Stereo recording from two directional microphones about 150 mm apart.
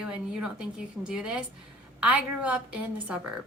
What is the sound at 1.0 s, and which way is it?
A woman's voice, 5° right (ahead or behind).